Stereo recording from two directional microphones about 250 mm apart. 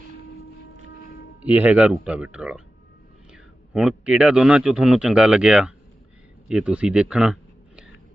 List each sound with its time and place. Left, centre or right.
1.5 s a man's voice: centre